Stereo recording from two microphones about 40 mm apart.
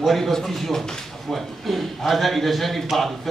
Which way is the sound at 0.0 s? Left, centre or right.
Centre.